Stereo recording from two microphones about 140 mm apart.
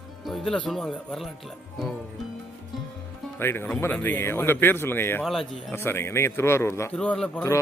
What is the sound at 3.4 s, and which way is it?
Speech, 15° left (ahead or behind).